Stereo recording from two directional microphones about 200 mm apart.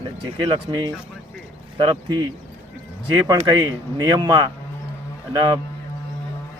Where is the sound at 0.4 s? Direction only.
20° right (ahead or behind).